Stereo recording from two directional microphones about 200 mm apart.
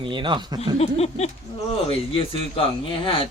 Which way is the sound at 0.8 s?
30° left (ahead or behind).